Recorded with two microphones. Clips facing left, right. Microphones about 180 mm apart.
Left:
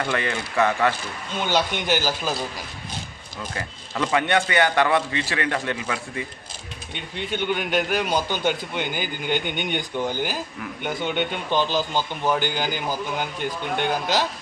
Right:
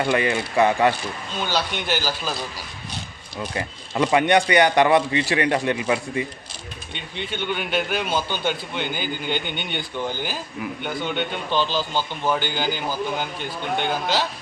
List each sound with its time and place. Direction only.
0.0 s speech: 15° right (ahead or behind)
1.5 s a man's voice: 15° left (ahead or behind)
3.5 s speech: 20° right (ahead or behind)
7.2 s a man's voice: 10° left (ahead or behind)